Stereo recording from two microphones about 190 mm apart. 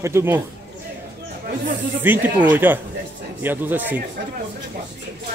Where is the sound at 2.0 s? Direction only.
10° right (ahead or behind).